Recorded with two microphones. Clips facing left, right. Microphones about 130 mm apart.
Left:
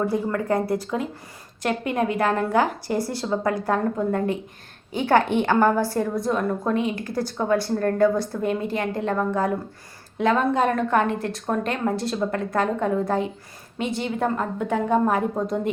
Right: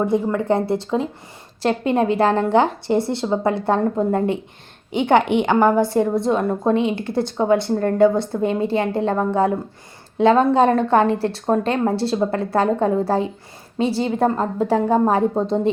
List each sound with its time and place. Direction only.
0.0 s a woman's voice: 20° right (ahead or behind)